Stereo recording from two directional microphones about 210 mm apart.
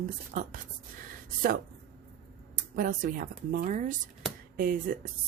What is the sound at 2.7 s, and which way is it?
A woman's voice, 40° right (ahead or behind).